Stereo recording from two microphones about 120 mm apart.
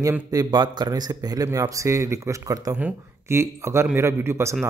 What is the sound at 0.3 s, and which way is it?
A man's voice, 35° right (ahead or behind).